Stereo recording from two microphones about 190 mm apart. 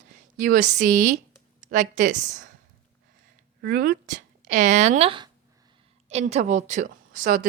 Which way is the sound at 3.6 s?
50° right (ahead or behind).